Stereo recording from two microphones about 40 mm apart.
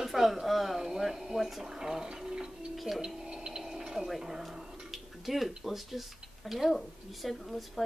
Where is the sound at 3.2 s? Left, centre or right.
Centre.